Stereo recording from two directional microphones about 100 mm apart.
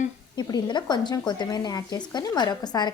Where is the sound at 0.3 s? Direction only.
45° left (ahead or behind).